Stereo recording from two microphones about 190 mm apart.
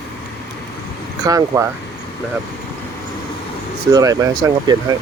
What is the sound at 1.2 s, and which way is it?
Speech, 15° right (ahead or behind).